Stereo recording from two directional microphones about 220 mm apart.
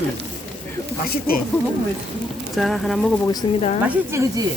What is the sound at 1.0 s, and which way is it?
Speech, 45° left (ahead or behind).